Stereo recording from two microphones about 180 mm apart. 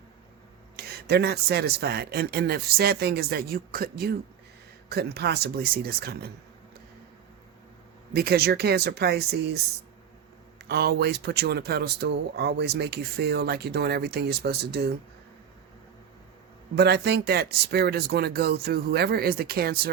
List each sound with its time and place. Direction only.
0.8 s speech: 60° right (ahead or behind)
8.1 s speech: 60° right (ahead or behind)
10.7 s speech: 60° right (ahead or behind)
16.7 s speech: 65° right (ahead or behind)